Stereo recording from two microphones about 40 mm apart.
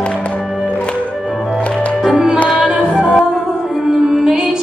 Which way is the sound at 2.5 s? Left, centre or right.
Right.